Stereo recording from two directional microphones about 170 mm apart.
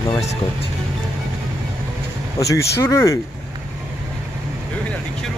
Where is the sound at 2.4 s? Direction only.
20° left (ahead or behind).